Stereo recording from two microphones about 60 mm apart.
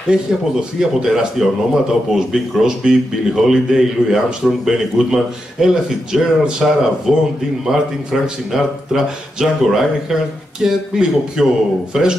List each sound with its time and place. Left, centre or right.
0.7 s a man's voice: centre